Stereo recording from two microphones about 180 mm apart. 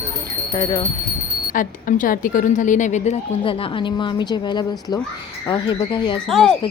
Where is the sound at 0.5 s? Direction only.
20° left (ahead or behind).